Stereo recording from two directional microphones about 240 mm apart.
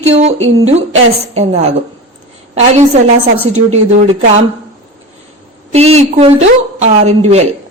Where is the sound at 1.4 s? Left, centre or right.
Right.